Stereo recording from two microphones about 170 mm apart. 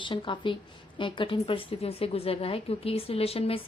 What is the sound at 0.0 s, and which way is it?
A woman's voice, 30° left (ahead or behind).